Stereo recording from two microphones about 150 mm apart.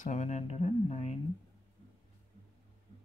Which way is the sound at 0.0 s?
50° left (ahead or behind).